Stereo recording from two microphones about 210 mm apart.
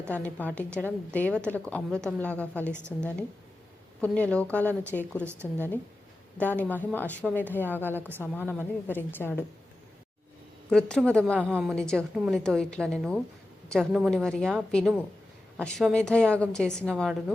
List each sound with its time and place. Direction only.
0.1 s a woman's voice: 5° left (ahead or behind)
2.7 s a woman's voice: 10° right (ahead or behind)
4.0 s a woman's voice: 5° left (ahead or behind)
5.2 s a woman's voice: 10° right (ahead or behind)
5.5 s a woman's voice: 10° left (ahead or behind)
10.7 s a woman's voice: 5° left (ahead or behind)